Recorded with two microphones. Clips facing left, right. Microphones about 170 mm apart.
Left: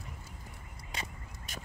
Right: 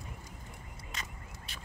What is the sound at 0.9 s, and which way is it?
Vehicle, 40° left (ahead or behind).